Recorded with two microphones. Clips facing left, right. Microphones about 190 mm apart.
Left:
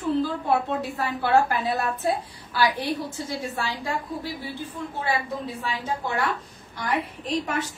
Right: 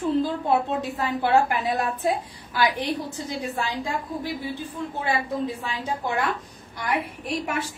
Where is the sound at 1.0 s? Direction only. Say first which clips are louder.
Right 1 dB; 15° right (ahead or behind).